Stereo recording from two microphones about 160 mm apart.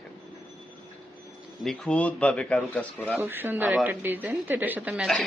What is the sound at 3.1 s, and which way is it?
Speech, 10° right (ahead or behind).